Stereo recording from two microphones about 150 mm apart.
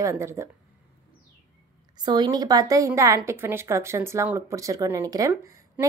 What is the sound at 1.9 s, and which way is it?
A woman's voice, 30° right (ahead or behind).